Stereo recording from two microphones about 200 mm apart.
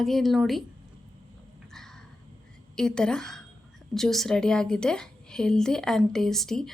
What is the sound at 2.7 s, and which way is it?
A woman's voice, 5° left (ahead or behind).